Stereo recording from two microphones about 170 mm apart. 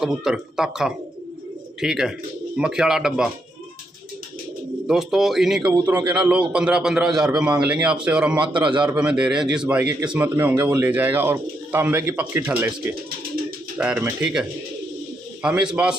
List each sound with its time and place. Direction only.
0.0 s a man's voice: 5° right (ahead or behind)
4.8 s a man's voice: centre (ahead or behind)
8.4 s a man's voice: 25° right (ahead or behind)
8.8 s a man's voice: 5° right (ahead or behind)
13.7 s speech: 10° right (ahead or behind)
15.4 s a man's voice: 5° right (ahead or behind)